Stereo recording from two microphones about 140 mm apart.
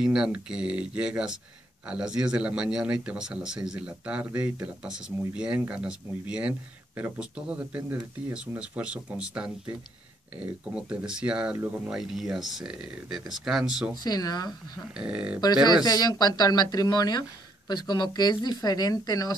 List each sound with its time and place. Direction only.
0.0 s speech: 5° right (ahead or behind)
14.0 s speech: 30° left (ahead or behind)
14.8 s speech: 5° right (ahead or behind)
15.4 s speech: 30° left (ahead or behind)